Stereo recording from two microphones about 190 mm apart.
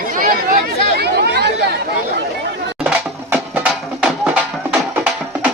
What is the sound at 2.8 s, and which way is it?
Music, 5° right (ahead or behind).